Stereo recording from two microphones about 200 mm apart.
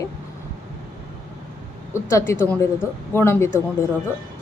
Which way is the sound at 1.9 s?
15° left (ahead or behind).